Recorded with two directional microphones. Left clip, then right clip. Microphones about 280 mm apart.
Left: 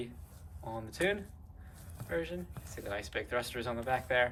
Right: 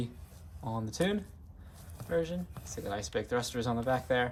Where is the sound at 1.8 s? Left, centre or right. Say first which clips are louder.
Right 2 dB; centre.